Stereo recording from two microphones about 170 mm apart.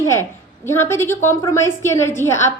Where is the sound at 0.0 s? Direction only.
15° left (ahead or behind).